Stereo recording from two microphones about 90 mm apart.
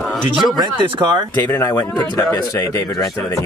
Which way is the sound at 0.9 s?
55° right (ahead or behind).